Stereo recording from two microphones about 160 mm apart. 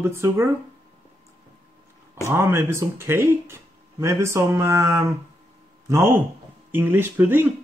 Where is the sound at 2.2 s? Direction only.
15° right (ahead or behind).